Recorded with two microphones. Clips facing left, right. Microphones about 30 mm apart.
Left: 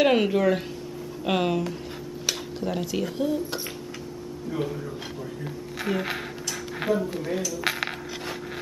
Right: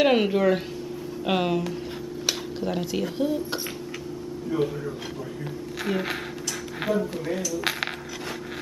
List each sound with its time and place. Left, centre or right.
0.0 s speech: centre
5.9 s speech: centre